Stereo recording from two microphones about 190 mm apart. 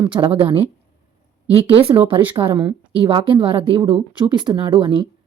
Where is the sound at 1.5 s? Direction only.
30° right (ahead or behind).